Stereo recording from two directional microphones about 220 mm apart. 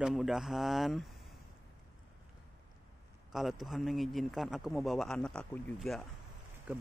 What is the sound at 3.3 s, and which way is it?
A man's voice, centre (ahead or behind).